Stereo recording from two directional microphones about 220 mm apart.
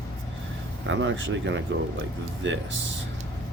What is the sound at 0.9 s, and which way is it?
Speech, 60° right (ahead or behind).